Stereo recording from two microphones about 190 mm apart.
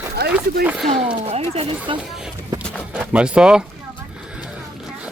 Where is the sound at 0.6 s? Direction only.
5° right (ahead or behind).